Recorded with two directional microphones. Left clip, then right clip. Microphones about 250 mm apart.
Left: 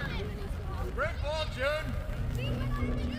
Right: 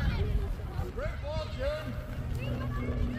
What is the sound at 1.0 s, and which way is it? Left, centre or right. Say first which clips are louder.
Vehicle: left 5 dB; centre.